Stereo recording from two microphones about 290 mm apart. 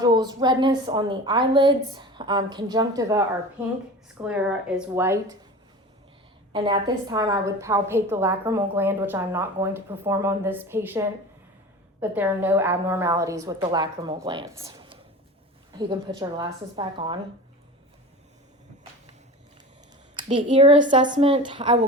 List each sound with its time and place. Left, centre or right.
0.0 s a woman's voice: centre
6.5 s a woman's voice: centre
20.1 s a woman's voice: centre